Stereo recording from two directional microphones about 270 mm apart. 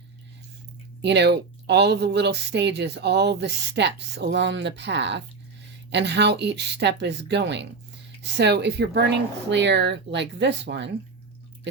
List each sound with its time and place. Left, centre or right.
1.0 s speech: right